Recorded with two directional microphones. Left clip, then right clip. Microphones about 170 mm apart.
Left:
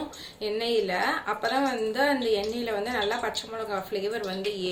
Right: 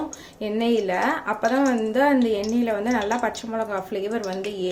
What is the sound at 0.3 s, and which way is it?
A woman's voice, 65° right (ahead or behind).